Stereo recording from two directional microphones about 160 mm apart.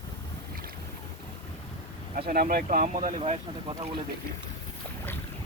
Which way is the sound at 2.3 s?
70° right (ahead or behind).